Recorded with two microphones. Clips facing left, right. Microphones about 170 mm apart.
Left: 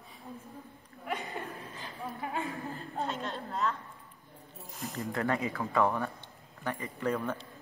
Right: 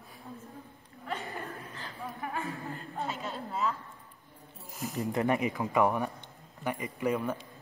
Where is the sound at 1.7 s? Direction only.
15° left (ahead or behind).